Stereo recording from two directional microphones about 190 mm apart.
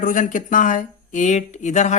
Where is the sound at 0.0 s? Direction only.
45° left (ahead or behind).